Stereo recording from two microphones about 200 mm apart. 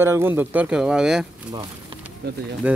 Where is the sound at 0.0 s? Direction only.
10° right (ahead or behind).